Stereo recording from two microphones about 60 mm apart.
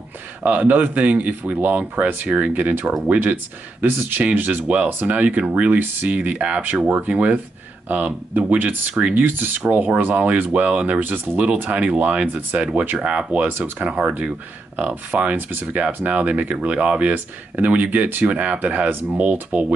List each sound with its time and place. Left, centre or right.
0.4 s speech: right
13.5 s speech: right
13.8 s speech: right